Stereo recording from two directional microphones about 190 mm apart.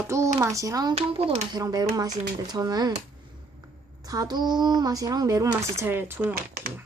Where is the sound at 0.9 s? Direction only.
30° right (ahead or behind).